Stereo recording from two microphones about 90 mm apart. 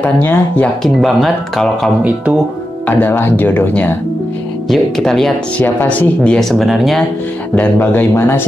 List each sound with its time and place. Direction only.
0.0 s speech: 20° left (ahead or behind)
0.8 s speech: 5° left (ahead or behind)
2.9 s speech: 25° left (ahead or behind)
4.6 s speech: 5° left (ahead or behind)
5.6 s speech: 20° left (ahead or behind); by 7.1 s centre (ahead or behind)
7.5 s speech: 20° left (ahead or behind)